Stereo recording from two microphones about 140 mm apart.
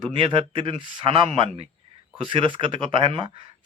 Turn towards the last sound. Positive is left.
turn(degrees=-40)  # may be behind; listen again after turning